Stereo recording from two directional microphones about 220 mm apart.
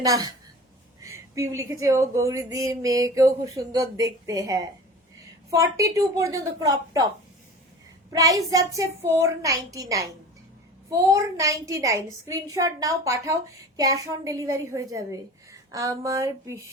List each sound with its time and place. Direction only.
0.0 s a woman's voice: 15° right (ahead or behind)
8.1 s a woman's voice: 15° right (ahead or behind)